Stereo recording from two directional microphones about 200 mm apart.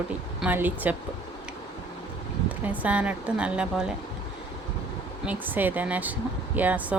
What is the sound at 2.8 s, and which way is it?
Speech, 5° right (ahead or behind).